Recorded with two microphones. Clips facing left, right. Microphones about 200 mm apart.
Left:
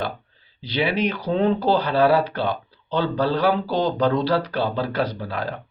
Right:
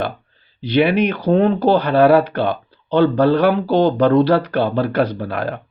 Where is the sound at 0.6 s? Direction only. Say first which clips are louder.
Right 7 dB; 60° right (ahead or behind).